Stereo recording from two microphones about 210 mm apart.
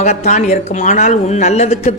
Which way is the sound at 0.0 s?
35° left (ahead or behind).